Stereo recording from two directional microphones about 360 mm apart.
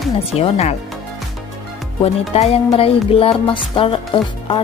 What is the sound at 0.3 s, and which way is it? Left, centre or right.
Music, centre.